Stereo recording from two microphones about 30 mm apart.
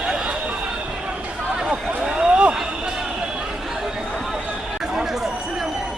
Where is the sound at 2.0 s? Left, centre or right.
Right.